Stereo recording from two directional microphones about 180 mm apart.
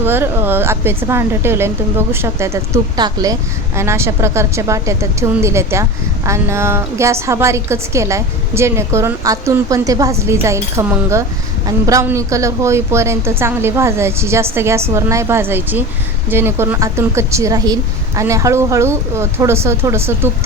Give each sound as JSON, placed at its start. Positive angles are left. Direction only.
{"t": 0.0, "sound": "a woman's voice", "side_deg": -10}